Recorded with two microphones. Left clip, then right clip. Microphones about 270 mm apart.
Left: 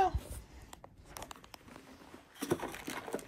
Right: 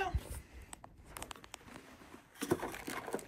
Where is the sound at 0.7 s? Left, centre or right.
Left.